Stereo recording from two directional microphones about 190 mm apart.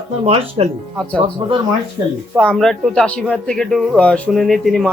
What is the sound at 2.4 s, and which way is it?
Speech, 5° left (ahead or behind).